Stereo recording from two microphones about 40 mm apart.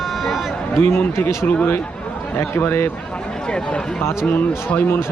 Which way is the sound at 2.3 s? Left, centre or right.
Left.